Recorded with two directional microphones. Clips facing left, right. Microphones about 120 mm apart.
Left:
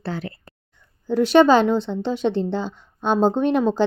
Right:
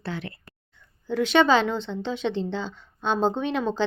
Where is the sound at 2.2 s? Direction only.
40° left (ahead or behind).